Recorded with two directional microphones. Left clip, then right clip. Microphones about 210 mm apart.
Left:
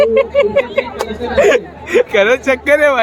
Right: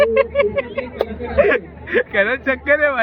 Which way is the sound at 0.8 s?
15° left (ahead or behind).